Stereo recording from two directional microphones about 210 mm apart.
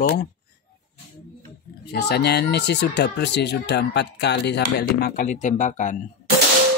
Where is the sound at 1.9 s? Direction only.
50° left (ahead or behind).